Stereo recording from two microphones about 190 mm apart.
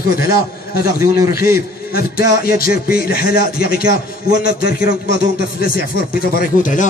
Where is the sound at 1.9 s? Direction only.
50° left (ahead or behind).